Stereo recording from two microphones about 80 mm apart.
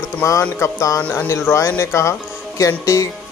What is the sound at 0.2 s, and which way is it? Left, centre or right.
Speech, left.